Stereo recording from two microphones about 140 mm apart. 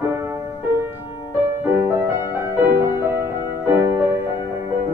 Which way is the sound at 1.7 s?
15° right (ahead or behind).